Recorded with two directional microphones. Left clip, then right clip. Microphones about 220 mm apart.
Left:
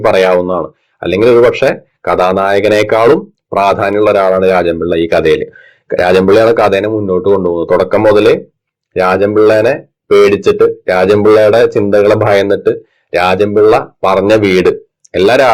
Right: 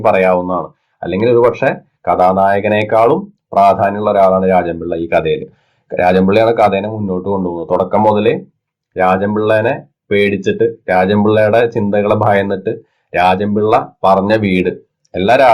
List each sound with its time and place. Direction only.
0.0 s speech: 30° left (ahead or behind)